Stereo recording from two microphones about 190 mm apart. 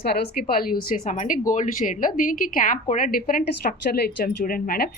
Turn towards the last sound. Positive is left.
turn(degrees=50)  # may be behind; listen again after turning